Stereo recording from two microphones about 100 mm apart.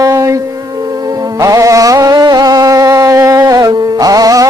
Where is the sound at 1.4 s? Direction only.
35° right (ahead or behind).